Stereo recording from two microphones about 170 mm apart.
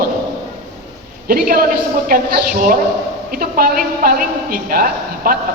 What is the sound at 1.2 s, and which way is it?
A woman's voice, 60° right (ahead or behind).